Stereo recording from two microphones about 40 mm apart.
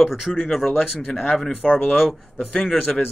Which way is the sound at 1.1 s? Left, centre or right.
Centre.